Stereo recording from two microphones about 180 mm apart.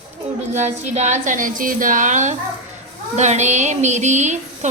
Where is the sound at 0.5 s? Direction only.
40° right (ahead or behind).